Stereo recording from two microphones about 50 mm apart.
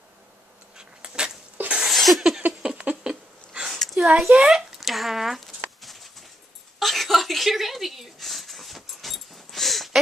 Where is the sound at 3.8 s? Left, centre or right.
Centre.